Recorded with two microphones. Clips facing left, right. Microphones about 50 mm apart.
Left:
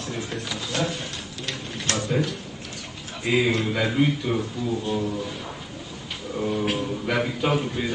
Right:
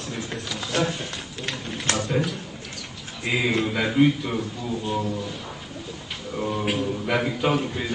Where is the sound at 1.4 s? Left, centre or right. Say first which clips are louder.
Right 3 dB; right.